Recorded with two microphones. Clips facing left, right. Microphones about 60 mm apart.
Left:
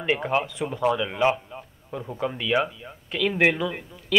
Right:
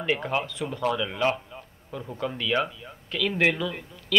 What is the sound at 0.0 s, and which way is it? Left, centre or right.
A man's voice, centre.